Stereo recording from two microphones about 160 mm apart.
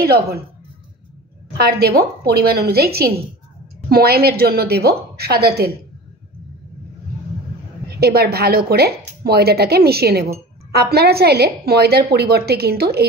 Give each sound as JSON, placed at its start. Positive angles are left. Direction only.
{"t": 0.0, "sound": "a woman's voice", "side_deg": -75}
{"t": 1.6, "sound": "a woman's voice", "side_deg": -75}
{"t": 8.0, "sound": "speech", "side_deg": -80}